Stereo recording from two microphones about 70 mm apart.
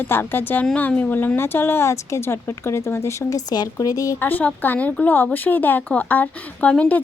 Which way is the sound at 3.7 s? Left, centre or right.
Left.